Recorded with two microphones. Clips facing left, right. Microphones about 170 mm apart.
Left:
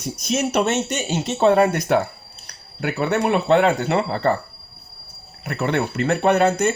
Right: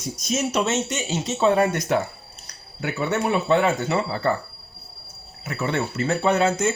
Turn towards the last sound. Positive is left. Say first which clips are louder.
# left 3 dB
turn(degrees=65)  # may be behind; listen again after turning